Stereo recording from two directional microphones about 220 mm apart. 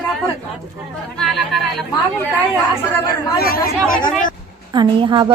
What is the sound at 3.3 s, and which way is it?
Speech, 40° left (ahead or behind).